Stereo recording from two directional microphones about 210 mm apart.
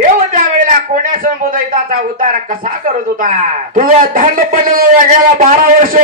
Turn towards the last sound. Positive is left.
turn(degrees=-40)  # may be behind; listen again after turning